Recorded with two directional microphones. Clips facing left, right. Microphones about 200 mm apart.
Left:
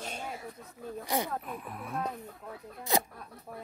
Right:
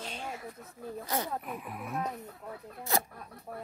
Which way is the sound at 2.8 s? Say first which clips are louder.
Left 2 dB; 15° left (ahead or behind).